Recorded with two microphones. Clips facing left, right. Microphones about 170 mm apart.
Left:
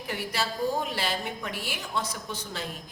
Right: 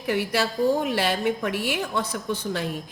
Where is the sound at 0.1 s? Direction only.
65° right (ahead or behind).